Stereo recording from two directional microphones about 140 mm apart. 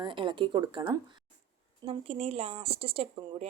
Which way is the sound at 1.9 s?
45° right (ahead or behind).